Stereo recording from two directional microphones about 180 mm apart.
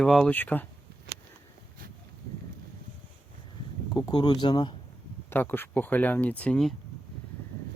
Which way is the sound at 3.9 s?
25° left (ahead or behind).